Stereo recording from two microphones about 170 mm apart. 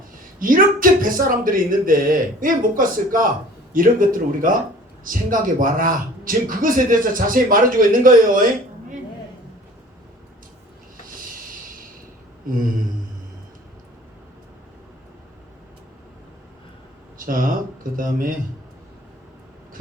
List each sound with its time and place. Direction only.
0.3 s speech: 55° right (ahead or behind)
11.0 s music: 55° right (ahead or behind)
12.5 s speech: 55° right (ahead or behind)
17.2 s speech: 55° right (ahead or behind)